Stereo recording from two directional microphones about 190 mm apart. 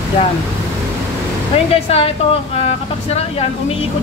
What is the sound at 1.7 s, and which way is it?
Speech, 30° left (ahead or behind).